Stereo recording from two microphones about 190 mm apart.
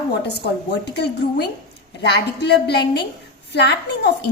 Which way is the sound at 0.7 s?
60° left (ahead or behind).